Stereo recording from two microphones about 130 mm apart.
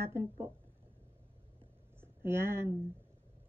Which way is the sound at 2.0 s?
20° right (ahead or behind).